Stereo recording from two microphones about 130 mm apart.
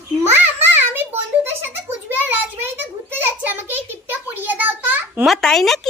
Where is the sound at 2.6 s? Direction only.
15° right (ahead or behind).